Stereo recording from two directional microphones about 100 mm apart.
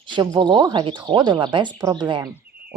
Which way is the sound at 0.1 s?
50° right (ahead or behind).